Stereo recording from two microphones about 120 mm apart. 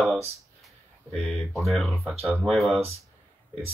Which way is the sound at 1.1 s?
10° left (ahead or behind).